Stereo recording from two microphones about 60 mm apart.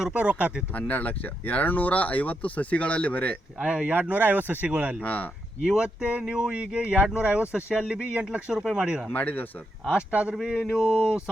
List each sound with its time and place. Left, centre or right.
0.1 s speech: right
0.7 s speech: left
3.6 s speech: centre
3.9 s speech: right
4.7 s speech: centre
5.0 s speech: left
5.6 s speech: centre
8.5 s speech: centre
9.1 s speech: left
9.9 s speech: right